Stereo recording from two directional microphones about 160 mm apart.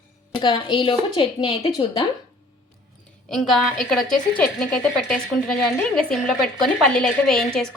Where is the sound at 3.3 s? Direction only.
Centre (ahead or behind).